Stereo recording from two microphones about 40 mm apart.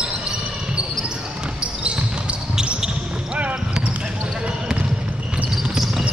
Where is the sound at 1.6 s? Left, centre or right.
Right.